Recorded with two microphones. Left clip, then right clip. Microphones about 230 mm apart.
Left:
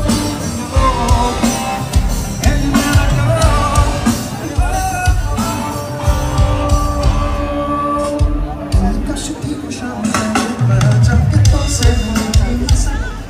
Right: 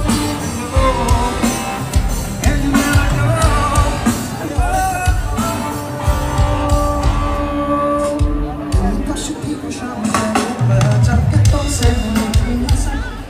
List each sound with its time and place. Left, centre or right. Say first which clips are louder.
0.7 s music: left 1 dB; centre
6.3 s music: right 1 dB; centre
10.0 s music: even; right